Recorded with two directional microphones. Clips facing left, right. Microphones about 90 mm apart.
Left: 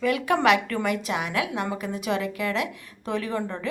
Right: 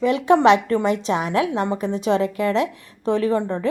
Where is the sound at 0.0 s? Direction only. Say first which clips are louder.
Right 6 dB; 25° right (ahead or behind).